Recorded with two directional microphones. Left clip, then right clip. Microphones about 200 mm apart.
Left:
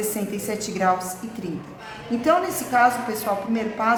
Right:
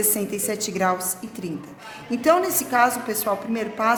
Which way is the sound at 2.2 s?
45° right (ahead or behind).